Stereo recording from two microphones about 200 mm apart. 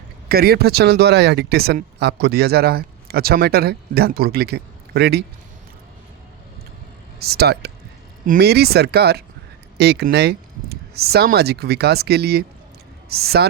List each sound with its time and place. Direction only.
0.3 s speech: 50° right (ahead or behind)
7.2 s a woman's voice: 50° right (ahead or behind)